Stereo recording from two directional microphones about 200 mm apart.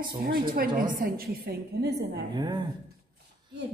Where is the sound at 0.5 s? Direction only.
45° right (ahead or behind).